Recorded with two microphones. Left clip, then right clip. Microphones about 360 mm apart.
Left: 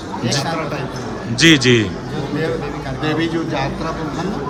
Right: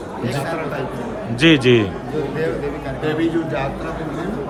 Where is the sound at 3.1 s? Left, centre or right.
Left.